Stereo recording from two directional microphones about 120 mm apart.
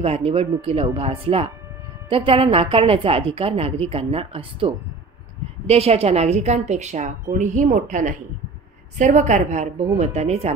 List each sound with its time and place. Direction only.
0.0 s a woman's voice: 55° right (ahead or behind); by 9.8 s 85° right
9.9 s a woman's voice: 65° right (ahead or behind)